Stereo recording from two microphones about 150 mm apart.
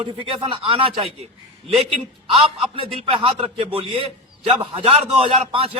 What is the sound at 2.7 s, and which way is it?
A man's voice, 35° right (ahead or behind).